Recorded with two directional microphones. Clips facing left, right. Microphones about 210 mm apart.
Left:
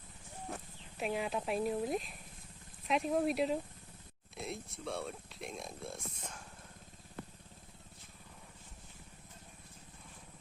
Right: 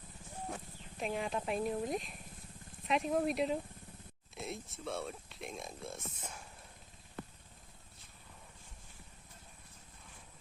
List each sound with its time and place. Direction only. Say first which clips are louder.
0.5 s speech: even; 5° left (ahead or behind)